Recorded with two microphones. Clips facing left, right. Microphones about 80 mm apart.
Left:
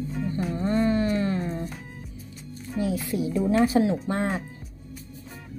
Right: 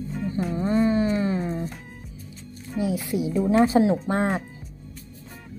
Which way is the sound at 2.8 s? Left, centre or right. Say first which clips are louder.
Right 1 dB; centre.